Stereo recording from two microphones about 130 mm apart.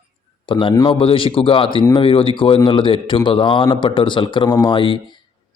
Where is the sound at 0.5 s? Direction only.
40° left (ahead or behind).